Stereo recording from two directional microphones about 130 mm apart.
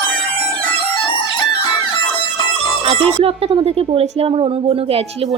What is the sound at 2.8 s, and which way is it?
A woman's voice, 45° right (ahead or behind).